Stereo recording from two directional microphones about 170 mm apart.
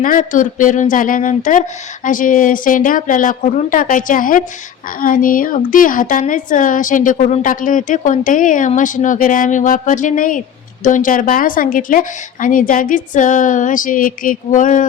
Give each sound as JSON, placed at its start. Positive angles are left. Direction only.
{"t": 0.0, "sound": "a woman's voice", "side_deg": 50}